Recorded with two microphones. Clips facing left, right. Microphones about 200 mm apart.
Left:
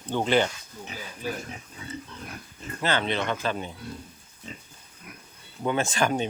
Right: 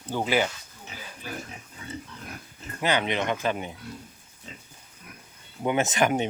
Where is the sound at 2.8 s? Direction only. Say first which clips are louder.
Right 1 dB; 15° right (ahead or behind).